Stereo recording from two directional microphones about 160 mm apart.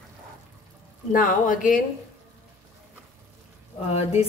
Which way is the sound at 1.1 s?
60° left (ahead or behind).